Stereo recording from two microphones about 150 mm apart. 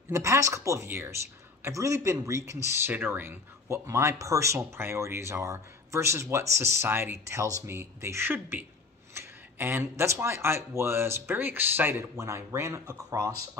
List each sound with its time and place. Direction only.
0.1 s speech: 20° right (ahead or behind)